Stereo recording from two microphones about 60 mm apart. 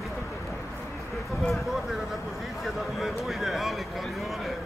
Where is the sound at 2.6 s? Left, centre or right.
Centre.